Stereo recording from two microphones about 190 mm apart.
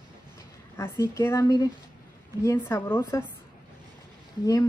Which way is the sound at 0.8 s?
15° left (ahead or behind).